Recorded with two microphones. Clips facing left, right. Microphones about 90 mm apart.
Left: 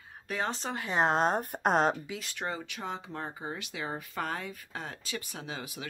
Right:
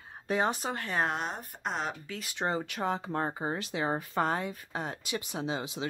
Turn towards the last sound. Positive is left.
turn(degrees=-20)  # may be behind; listen again after turning